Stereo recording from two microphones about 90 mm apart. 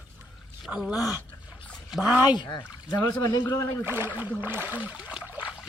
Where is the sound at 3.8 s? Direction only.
25° right (ahead or behind).